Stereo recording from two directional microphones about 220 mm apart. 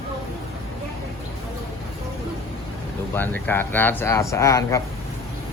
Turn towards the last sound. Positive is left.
turn(degrees=15)  # may be behind; listen again after turning